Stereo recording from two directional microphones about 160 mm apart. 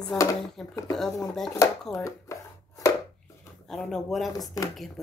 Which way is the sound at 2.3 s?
20° left (ahead or behind).